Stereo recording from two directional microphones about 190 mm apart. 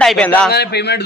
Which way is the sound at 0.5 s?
60° left (ahead or behind).